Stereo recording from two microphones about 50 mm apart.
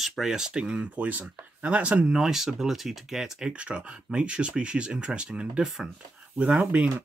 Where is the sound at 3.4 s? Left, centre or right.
Right.